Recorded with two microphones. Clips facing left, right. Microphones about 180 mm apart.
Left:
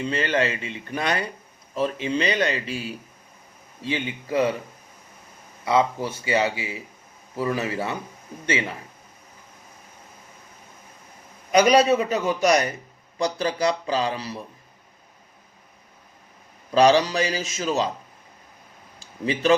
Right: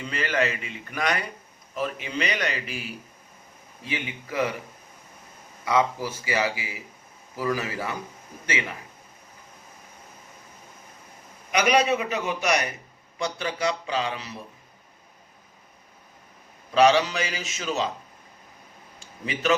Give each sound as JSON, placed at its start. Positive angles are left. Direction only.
{"t": 0.0, "sound": "a man's voice", "side_deg": 30}
{"t": 5.6, "sound": "a man's voice", "side_deg": 25}
{"t": 11.5, "sound": "speech", "side_deg": 35}
{"t": 16.7, "sound": "speech", "side_deg": 35}
{"t": 18.9, "sound": "a sound", "side_deg": 35}